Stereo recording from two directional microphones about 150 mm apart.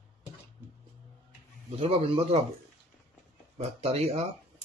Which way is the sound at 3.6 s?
45° right (ahead or behind).